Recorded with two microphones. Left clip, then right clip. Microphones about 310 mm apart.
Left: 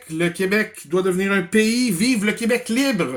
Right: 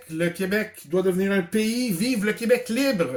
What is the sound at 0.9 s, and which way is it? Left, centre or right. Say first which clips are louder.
Speech: left 2 dB; left.